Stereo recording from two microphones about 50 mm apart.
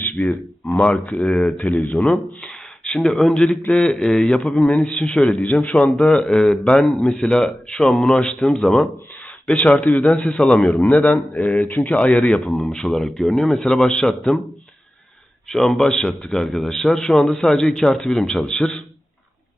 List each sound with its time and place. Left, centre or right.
0.0 s a man's voice: left
6.1 s a man's voice: centre
9.5 s a man's voice: left
15.4 s a man's voice: centre